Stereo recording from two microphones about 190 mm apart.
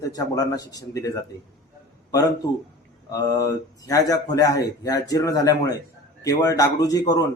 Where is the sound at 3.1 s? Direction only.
20° left (ahead or behind).